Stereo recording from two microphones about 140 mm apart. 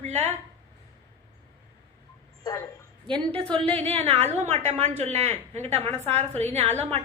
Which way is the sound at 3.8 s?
45° right (ahead or behind).